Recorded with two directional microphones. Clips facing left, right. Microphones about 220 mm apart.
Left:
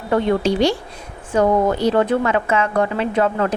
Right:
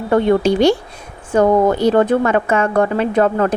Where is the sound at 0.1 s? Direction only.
50° right (ahead or behind).